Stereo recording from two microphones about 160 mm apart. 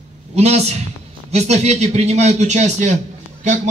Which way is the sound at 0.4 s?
40° right (ahead or behind).